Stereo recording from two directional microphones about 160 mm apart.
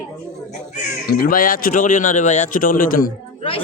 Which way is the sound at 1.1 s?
65° left (ahead or behind).